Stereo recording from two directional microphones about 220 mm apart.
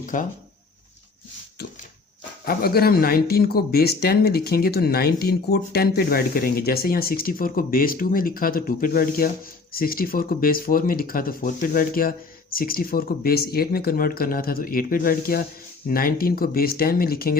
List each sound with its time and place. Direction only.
0.0 s speech: 35° left (ahead or behind)
2.5 s speech: 45° left (ahead or behind)